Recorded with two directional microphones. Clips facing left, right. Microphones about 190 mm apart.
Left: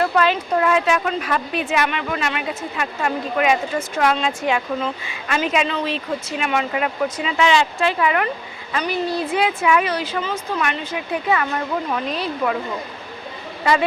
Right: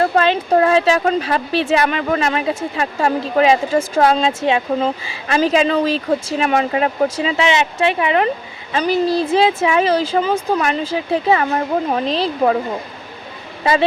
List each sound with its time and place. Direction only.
0.0 s a sound: 30° right (ahead or behind)
0.5 s a woman's voice: 30° right (ahead or behind)
10.2 s a woman's voice: 35° right (ahead or behind)